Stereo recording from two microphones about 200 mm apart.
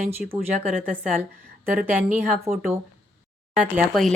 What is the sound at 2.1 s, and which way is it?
Speech, 10° right (ahead or behind).